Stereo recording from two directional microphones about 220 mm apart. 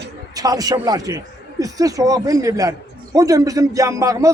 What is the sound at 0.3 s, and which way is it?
Speech, 15° right (ahead or behind).